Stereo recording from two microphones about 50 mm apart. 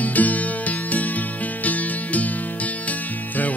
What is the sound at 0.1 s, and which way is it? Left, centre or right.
Music, left.